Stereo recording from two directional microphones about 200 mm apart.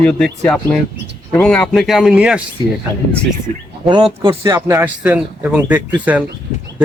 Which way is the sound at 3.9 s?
20° right (ahead or behind).